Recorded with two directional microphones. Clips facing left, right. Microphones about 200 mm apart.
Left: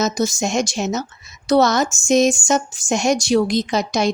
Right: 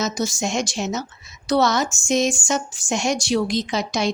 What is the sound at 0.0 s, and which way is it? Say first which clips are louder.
Speech: left 4 dB; 45° left (ahead or behind).